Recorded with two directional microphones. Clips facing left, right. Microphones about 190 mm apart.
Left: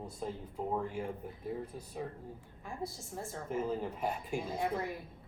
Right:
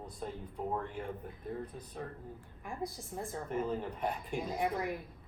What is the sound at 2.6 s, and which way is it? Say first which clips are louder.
Speech: right 1 dB; 15° right (ahead or behind).